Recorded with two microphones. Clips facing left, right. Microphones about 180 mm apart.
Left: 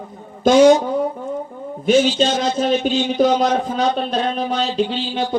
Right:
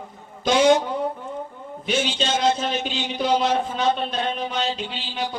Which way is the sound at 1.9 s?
45° left (ahead or behind).